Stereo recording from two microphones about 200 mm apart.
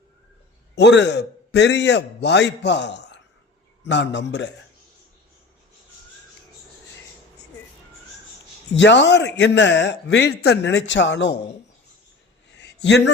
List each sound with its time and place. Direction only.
0.8 s speech: 60° left (ahead or behind)
8.7 s speech: 65° left (ahead or behind)
12.5 s a sound: 60° left (ahead or behind)